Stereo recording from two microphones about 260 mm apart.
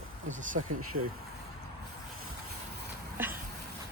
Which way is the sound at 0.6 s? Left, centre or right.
Right.